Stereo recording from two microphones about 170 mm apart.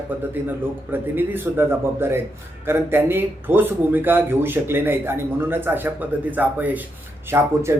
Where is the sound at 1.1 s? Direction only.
10° right (ahead or behind).